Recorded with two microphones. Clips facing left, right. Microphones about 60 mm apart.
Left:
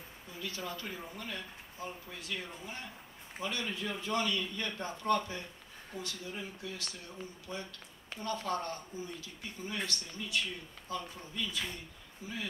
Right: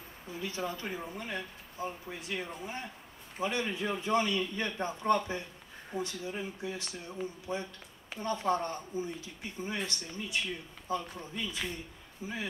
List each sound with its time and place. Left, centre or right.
0.3 s speech: right